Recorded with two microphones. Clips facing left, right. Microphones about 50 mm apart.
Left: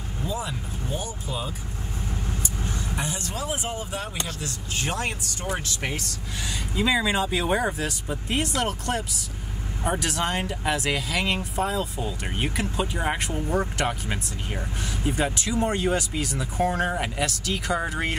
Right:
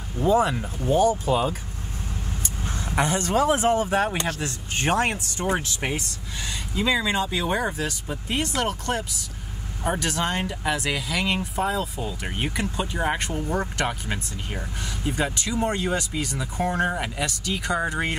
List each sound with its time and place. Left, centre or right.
0.2 s speech: right
3.0 s speech: right
5.4 s speech: right
6.7 s speech: centre